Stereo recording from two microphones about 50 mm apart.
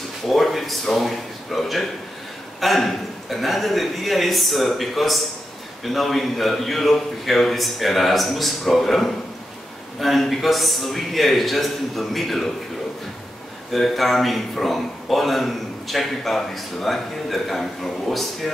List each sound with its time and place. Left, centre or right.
0.3 s a man's voice: centre
13.7 s a man's voice: centre